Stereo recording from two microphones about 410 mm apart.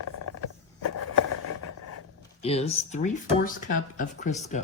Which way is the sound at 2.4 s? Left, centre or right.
Centre.